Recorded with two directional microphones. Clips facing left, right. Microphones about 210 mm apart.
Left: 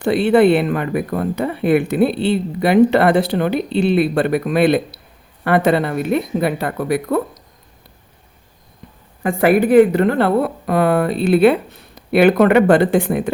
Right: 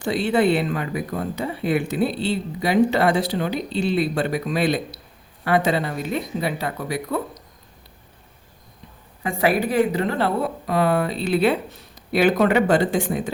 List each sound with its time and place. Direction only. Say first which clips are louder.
0.0 s speech: left 7 dB; 60° left (ahead or behind)
9.2 s speech: left 7 dB; 55° left (ahead or behind)